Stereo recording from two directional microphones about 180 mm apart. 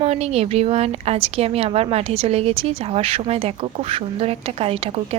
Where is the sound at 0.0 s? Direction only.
35° right (ahead or behind).